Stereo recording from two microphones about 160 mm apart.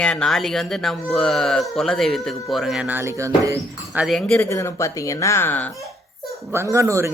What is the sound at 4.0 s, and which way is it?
Speech, centre (ahead or behind).